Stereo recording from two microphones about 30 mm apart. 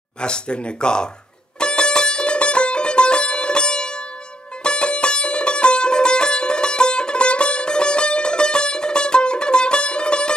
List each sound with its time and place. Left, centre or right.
0.2 s speech: left
1.6 s music: left